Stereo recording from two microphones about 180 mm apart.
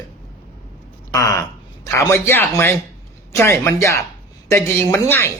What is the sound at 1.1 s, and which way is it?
Speech, 20° left (ahead or behind).